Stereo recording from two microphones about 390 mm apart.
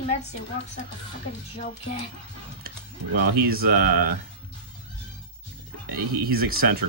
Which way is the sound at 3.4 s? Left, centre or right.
Right.